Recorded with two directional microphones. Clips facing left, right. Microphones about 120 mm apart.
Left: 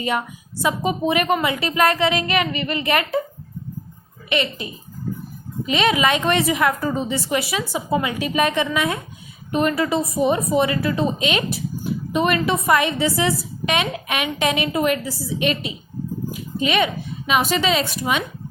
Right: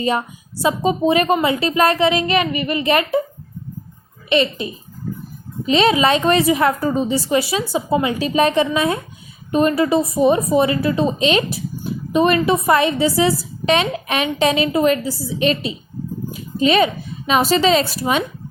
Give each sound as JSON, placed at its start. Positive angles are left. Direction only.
{"t": 0.0, "sound": "a woman's voice", "side_deg": -30}
{"t": 4.3, "sound": "a woman's voice", "side_deg": -25}